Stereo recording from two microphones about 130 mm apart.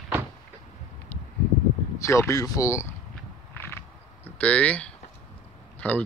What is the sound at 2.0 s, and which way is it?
Speech, 25° left (ahead or behind).